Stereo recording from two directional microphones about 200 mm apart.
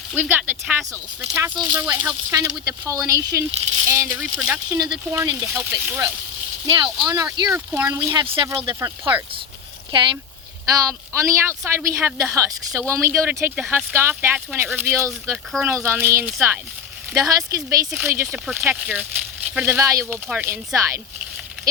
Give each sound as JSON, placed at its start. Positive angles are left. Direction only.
{"t": 0.2, "sound": "speech", "side_deg": -10}
{"t": 8.5, "sound": "speech", "side_deg": -25}
{"t": 10.7, "sound": "speech", "side_deg": -15}